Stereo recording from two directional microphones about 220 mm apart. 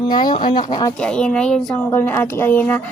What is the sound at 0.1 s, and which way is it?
Speech, 20° left (ahead or behind).